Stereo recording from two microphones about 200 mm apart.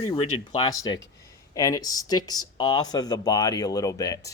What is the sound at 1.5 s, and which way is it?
Speech, 20° left (ahead or behind).